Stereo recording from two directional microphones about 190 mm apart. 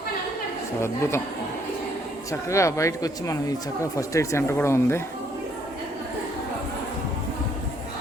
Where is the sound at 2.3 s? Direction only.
15° left (ahead or behind).